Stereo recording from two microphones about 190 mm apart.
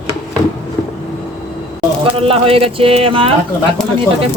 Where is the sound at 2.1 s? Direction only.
30° right (ahead or behind).